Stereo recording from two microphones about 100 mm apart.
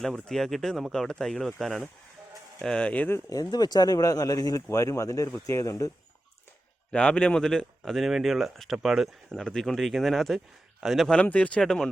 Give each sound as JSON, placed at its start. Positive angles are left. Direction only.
{"t": 0.0, "sound": "speech", "side_deg": 5}
{"t": 3.1, "sound": "speech", "side_deg": 35}
{"t": 6.9, "sound": "speech", "side_deg": 10}
{"t": 11.1, "sound": "speech", "side_deg": 10}